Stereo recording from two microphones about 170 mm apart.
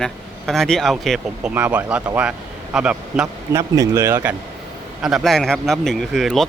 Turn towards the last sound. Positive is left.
turn(degrees=0)  # may be behind; listen again after turning